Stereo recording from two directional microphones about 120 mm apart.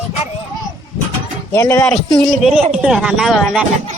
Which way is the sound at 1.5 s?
25° left (ahead or behind).